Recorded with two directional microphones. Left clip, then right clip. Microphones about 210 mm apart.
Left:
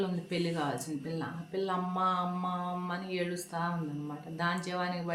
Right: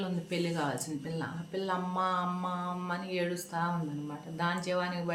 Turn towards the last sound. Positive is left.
turn(degrees=-5)  # may be behind; listen again after turning